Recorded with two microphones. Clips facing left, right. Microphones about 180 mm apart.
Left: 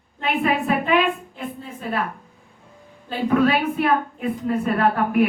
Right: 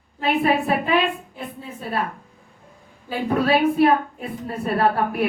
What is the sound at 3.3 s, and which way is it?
A woman's voice, 35° right (ahead or behind).